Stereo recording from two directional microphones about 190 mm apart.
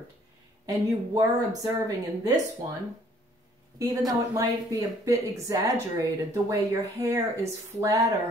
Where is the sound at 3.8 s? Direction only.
15° right (ahead or behind).